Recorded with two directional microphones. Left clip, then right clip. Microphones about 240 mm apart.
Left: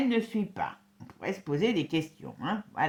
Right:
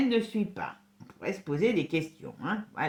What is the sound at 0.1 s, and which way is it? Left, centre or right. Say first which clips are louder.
Speech: right 1 dB; left.